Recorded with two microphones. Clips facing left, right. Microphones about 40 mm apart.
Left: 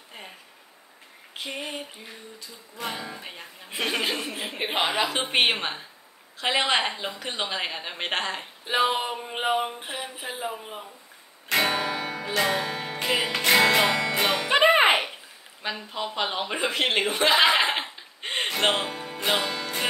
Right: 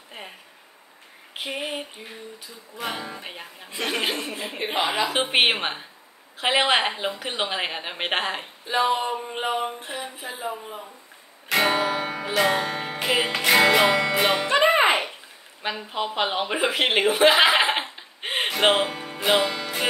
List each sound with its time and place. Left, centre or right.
0.2 s a sound: right
1.6 s a sound: right
2.7 s a woman's voice: centre
4.1 s speech: centre
5.1 s a woman's voice: centre
8.6 s speech: centre
11.4 s music: centre
14.5 s music: centre
15.6 s a woman's voice: centre